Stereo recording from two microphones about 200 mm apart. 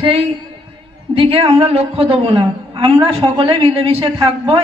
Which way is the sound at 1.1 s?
25° right (ahead or behind).